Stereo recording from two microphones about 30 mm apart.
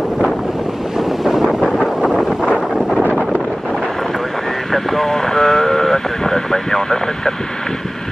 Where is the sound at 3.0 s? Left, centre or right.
Right.